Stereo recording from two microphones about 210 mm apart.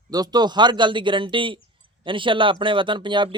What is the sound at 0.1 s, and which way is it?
Speech, 20° right (ahead or behind).